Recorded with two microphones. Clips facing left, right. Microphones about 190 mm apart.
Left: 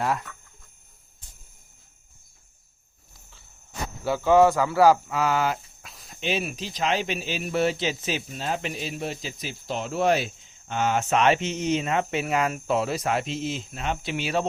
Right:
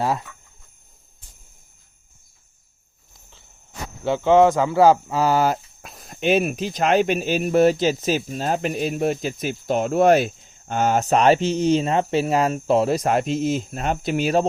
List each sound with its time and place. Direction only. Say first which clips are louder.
4.0 s speech: right 3 dB; 20° right (ahead or behind); by 14.4 s 45° right (ahead or behind)